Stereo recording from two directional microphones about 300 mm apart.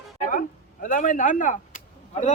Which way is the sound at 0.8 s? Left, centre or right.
Left.